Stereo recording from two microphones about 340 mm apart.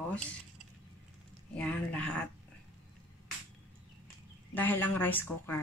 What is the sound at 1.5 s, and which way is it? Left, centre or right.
Speech, centre.